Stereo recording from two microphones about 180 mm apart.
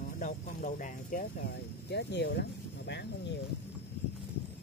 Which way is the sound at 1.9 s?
70° left (ahead or behind).